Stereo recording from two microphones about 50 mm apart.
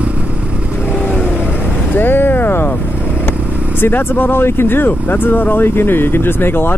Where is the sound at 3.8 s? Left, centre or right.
Left.